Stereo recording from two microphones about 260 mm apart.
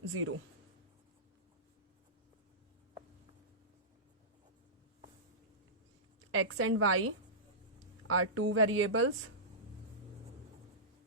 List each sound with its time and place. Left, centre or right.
0.1 s speech: right
6.3 s a woman's voice: right